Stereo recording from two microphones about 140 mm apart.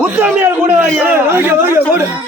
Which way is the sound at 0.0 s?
10° right (ahead or behind).